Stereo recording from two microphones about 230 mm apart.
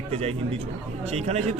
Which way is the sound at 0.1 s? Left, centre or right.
Right.